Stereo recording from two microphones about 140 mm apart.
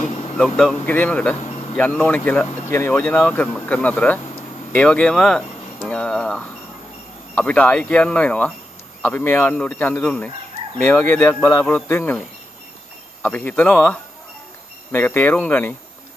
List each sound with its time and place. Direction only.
0.4 s speech: 5° left (ahead or behind)
13.2 s speech: 10° left (ahead or behind)